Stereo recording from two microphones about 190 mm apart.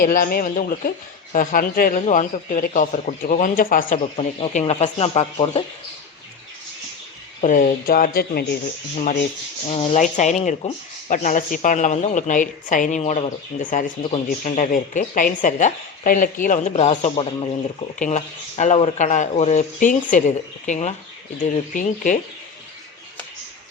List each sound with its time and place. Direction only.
0.0 s speech: 50° left (ahead or behind)
4.2 s speech: 30° left (ahead or behind)
7.4 s speech: 45° left (ahead or behind)
9.6 s speech: 30° left (ahead or behind)